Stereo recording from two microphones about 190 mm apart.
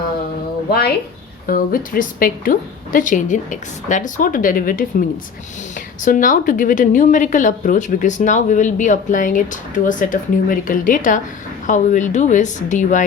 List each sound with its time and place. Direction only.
0.7 s a woman's voice: 55° left (ahead or behind)
6.1 s a woman's voice: 45° left (ahead or behind)